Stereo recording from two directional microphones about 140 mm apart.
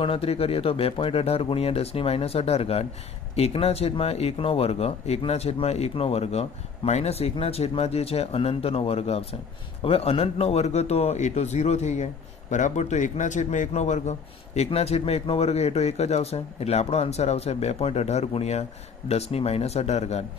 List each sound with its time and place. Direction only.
0.0 s a man's voice: 40° left (ahead or behind)